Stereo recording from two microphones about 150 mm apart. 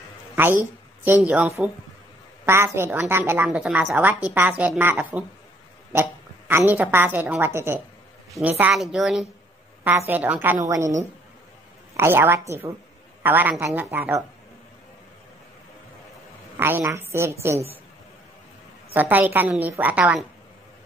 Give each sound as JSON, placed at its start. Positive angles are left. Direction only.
{"t": 0.4, "sound": "a woman's voice", "side_deg": -15}
{"t": 9.8, "sound": "a woman's voice", "side_deg": -15}
{"t": 12.0, "sound": "a woman's voice", "side_deg": -15}
{"t": 16.5, "sound": "a woman's voice", "side_deg": -15}
{"t": 18.9, "sound": "a woman's voice", "side_deg": -10}